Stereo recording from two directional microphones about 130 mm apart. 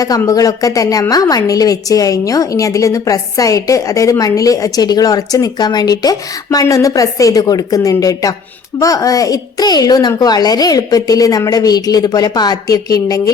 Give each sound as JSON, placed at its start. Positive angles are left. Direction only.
{"t": 0.2, "sound": "a woman's voice", "side_deg": 25}